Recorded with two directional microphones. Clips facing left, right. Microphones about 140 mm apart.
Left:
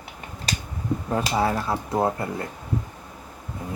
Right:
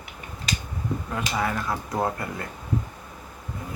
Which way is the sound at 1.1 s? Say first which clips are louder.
Left 5 dB; 30° left (ahead or behind).